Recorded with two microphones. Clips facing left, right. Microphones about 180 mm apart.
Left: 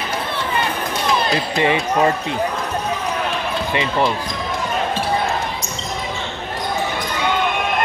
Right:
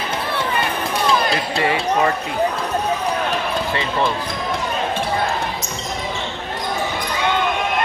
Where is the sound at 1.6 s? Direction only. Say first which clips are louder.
Left 2 dB; 20° left (ahead or behind).